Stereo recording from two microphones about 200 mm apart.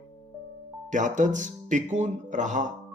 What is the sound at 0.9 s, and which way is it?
Speech, 40° right (ahead or behind).